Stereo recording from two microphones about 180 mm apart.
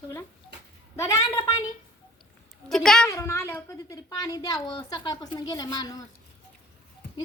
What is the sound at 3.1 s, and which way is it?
Speech, 15° left (ahead or behind).